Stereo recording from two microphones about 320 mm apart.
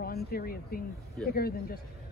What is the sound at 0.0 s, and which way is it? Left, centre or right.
A woman's voice, left.